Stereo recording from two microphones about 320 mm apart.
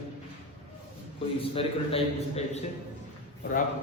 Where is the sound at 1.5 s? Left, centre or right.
Centre.